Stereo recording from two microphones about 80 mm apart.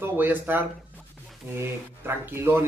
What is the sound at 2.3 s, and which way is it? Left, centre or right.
Speech, right.